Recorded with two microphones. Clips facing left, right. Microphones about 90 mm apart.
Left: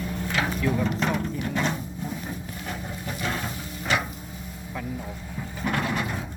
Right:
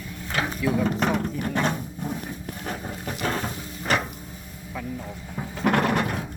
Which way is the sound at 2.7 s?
40° right (ahead or behind).